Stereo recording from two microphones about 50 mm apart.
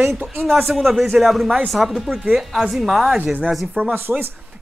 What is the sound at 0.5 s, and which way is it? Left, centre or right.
A woman's voice, centre.